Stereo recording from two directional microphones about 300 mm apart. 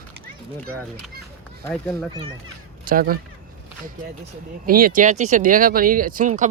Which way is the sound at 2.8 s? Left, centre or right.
Right.